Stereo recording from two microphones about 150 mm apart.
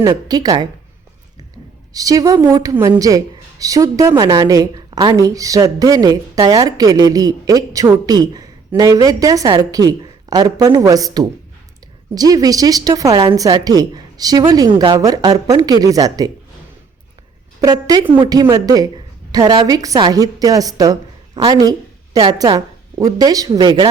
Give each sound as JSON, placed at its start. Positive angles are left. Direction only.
{"t": 0.0, "sound": "a woman's voice", "side_deg": -25}
{"t": 1.9, "sound": "a woman's voice", "side_deg": -25}
{"t": 17.6, "sound": "a woman's voice", "side_deg": -25}